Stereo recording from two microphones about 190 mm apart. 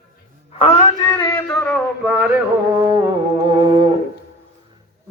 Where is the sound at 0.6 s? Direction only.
30° left (ahead or behind).